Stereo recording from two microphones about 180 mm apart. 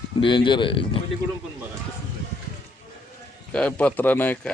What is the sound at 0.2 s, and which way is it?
Speech, 25° left (ahead or behind).